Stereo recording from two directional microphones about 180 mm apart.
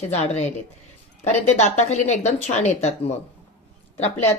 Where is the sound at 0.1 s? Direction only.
35° left (ahead or behind).